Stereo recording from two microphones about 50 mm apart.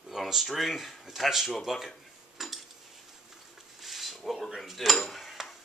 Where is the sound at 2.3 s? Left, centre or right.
Centre.